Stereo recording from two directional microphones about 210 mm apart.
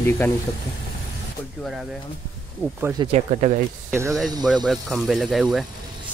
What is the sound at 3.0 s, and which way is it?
Speech, 30° right (ahead or behind).